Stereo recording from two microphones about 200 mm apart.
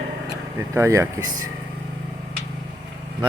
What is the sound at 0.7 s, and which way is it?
Speech, 15° right (ahead or behind).